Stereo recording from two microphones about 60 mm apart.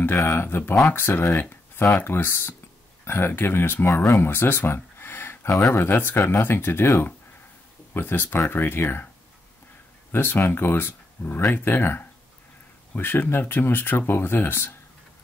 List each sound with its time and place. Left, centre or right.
0.2 s speech: left
4.7 s a sound: left
5.7 s speech: left
10.1 s speech: left